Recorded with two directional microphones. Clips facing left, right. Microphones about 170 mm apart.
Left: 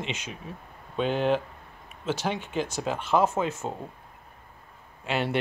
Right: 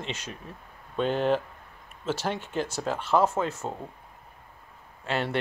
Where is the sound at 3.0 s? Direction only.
20° left (ahead or behind).